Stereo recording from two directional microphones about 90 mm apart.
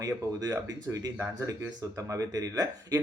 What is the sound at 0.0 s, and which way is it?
Speech, 40° right (ahead or behind).